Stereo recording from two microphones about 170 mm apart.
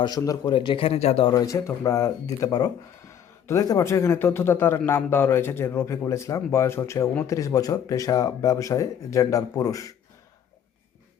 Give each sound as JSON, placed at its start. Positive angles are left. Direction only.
{"t": 0.0, "sound": "a man's voice", "side_deg": 20}
{"t": 1.3, "sound": "a man's voice", "side_deg": 20}